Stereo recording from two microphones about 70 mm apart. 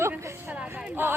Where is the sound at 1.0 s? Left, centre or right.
Right.